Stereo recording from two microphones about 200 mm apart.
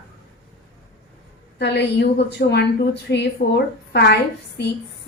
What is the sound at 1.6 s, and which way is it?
A woman's voice, 55° left (ahead or behind).